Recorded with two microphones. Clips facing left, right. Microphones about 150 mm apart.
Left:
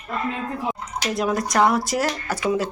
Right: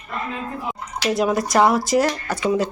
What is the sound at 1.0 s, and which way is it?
Speech, centre (ahead or behind).